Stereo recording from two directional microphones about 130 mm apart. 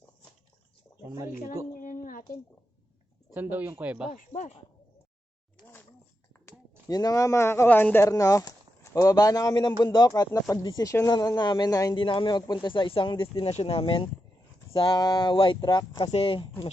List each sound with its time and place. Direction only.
1.8 s a sound: 90° left
3.3 s speech: 15° right (ahead or behind)
4.1 s speech: 80° left
6.4 s a man's voice: 30° left (ahead or behind)
11.9 s speech: 40° left (ahead or behind)